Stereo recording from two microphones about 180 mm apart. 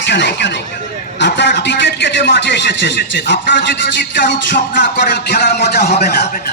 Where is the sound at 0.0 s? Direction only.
75° left (ahead or behind).